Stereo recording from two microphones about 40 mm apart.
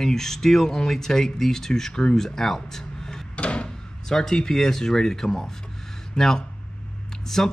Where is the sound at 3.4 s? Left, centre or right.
Left.